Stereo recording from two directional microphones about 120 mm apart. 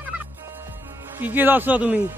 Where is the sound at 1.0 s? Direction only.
15° right (ahead or behind).